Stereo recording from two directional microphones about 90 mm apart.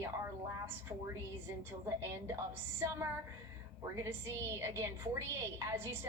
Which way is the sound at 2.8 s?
30° right (ahead or behind).